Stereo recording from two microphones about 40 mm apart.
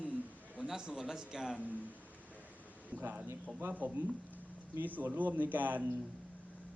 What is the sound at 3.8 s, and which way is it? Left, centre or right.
Speech, right.